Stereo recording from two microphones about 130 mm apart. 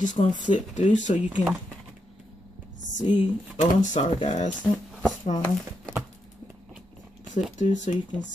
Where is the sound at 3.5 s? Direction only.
70° left (ahead or behind).